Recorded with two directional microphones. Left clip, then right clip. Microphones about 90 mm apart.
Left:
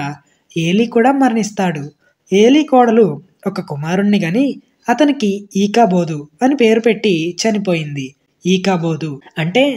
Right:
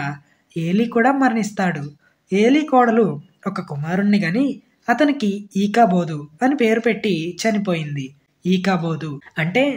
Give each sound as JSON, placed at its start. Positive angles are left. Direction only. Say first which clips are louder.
{"t": 0.7, "sound": "speech", "louder": "left 4 dB", "side_deg": 35}